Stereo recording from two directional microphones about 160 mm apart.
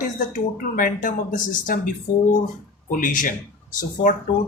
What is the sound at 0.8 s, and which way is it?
Speech, 55° left (ahead or behind).